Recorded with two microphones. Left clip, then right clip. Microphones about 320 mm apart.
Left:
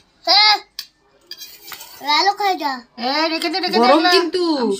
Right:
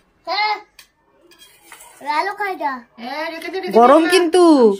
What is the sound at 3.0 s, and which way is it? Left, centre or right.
Speech, centre.